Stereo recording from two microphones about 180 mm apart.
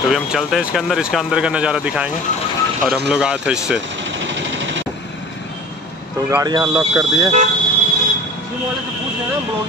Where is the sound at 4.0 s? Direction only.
90° right.